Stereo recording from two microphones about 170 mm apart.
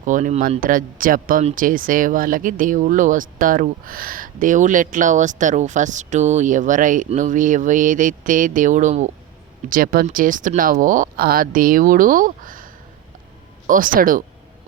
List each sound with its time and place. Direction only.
0.0 s speech: 50° right (ahead or behind)